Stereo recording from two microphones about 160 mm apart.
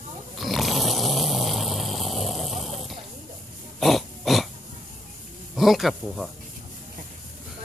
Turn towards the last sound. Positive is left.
turn(degrees=0)  # may be behind; listen again after turning